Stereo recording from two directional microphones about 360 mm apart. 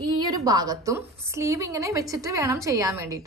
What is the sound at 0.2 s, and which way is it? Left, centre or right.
A woman's voice, centre.